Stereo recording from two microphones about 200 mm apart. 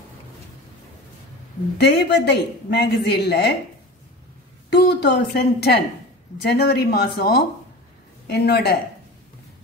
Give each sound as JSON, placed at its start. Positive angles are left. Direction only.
{"t": 1.8, "sound": "a woman's voice", "side_deg": 60}
{"t": 4.6, "sound": "a woman's voice", "side_deg": 55}